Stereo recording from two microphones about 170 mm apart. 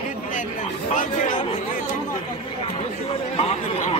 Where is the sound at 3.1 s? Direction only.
35° left (ahead or behind).